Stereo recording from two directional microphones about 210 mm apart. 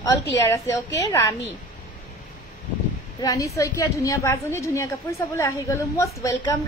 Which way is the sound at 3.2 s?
15° left (ahead or behind).